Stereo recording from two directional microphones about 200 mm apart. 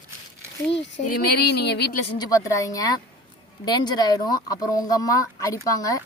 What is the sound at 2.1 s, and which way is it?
Speech, 20° left (ahead or behind).